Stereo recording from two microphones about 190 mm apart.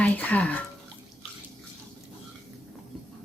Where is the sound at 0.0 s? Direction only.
10° left (ahead or behind).